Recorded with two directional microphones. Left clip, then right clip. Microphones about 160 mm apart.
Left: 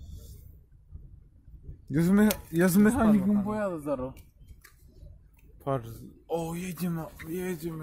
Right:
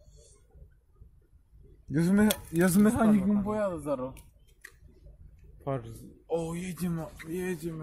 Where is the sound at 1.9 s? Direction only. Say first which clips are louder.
Left 1 dB; 25° left (ahead or behind).